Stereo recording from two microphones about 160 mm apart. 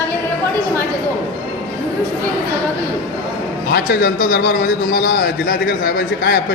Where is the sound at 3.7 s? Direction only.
65° left (ahead or behind).